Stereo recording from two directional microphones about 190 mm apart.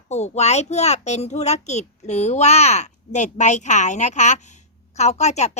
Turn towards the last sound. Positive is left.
turn(degrees=35)  # may be behind; listen again after turning